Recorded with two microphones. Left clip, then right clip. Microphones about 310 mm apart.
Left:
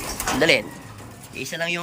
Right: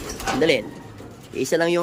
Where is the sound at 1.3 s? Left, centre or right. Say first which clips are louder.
Right 6 dB; centre.